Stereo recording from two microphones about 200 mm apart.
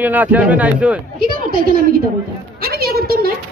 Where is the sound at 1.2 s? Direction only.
45° right (ahead or behind).